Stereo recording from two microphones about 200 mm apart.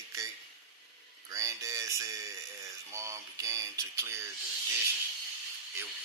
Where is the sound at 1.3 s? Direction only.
15° right (ahead or behind).